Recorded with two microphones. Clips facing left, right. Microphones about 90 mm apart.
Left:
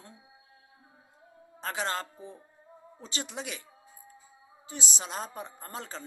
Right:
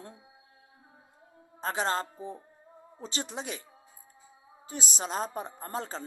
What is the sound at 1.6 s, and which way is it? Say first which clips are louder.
A woman's voice: right 3 dB; 35° right (ahead or behind).